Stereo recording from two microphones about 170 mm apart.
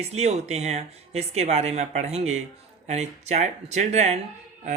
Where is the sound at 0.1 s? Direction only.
40° right (ahead or behind).